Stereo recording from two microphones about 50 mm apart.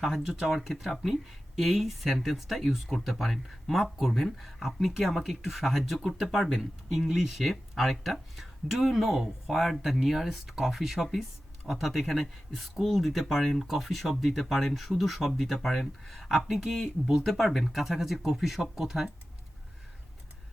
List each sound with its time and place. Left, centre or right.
0.2 s speech: centre